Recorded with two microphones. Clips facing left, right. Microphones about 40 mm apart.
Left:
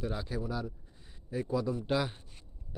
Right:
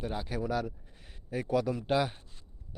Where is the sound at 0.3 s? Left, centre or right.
Right.